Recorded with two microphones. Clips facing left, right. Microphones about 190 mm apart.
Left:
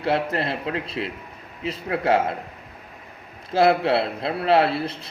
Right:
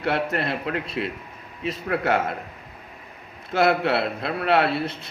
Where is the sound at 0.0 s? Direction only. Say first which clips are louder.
Left 1 dB; 30° left (ahead or behind).